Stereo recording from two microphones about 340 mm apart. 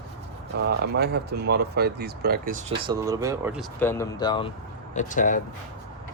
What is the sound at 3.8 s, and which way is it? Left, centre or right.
Speech, centre.